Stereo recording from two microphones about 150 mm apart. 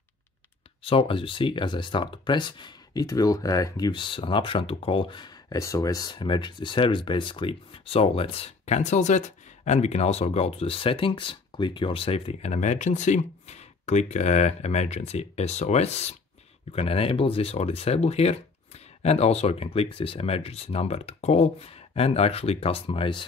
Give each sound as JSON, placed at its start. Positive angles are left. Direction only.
{"t": 0.8, "sound": "speech", "side_deg": 35}